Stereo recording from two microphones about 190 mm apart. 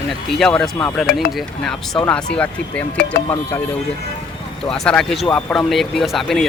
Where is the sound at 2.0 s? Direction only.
5° left (ahead or behind).